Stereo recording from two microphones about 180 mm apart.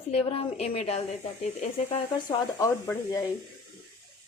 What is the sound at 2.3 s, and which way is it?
Speech, 20° left (ahead or behind).